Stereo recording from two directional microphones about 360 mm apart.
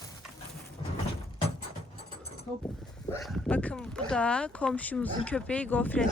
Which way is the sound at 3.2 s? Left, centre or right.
Centre.